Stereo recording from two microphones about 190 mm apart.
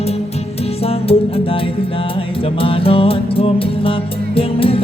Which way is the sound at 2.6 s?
30° left (ahead or behind).